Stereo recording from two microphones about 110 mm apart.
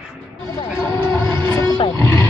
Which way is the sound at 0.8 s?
25° left (ahead or behind).